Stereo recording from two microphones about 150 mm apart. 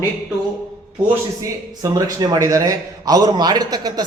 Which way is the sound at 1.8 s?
25° right (ahead or behind).